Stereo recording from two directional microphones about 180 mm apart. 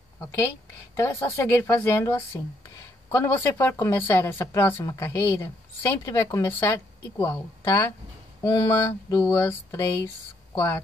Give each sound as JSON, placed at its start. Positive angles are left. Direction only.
{"t": 0.9, "sound": "speech", "side_deg": 15}